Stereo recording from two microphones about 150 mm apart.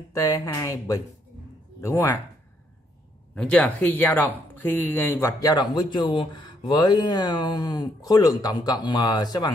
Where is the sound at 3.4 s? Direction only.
10° left (ahead or behind).